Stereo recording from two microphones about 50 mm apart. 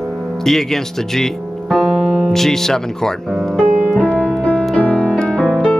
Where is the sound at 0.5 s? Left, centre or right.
Centre.